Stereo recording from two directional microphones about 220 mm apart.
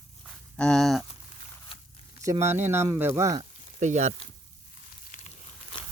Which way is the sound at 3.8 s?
30° right (ahead or behind).